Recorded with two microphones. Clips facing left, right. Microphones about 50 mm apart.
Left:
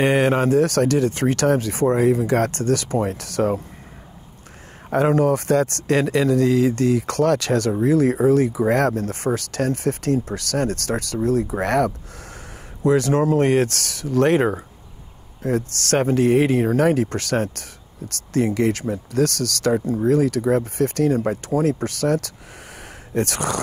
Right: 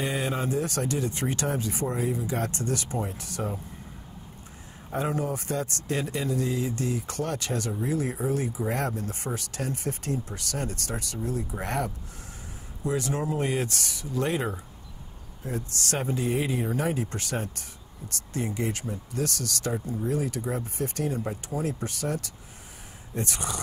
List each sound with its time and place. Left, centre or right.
0.0 s speech: left
4.8 s a man's voice: left